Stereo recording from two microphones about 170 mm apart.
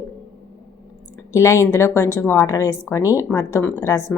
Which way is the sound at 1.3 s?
15° left (ahead or behind).